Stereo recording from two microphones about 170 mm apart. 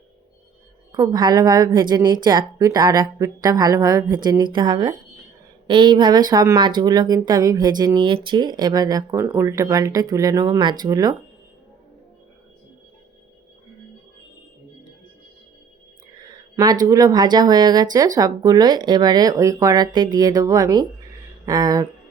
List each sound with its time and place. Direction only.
0.9 s speech: 20° right (ahead or behind)
16.2 s a sound: 25° right (ahead or behind)
16.8 s speech: 20° right (ahead or behind)